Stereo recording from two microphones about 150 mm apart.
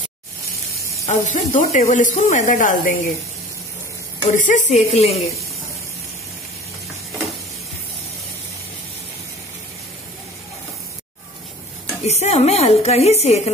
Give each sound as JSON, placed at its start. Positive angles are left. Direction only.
{"t": 1.0, "sound": "speech", "side_deg": 55}
{"t": 4.4, "sound": "speech", "side_deg": 55}
{"t": 12.0, "sound": "speech", "side_deg": 45}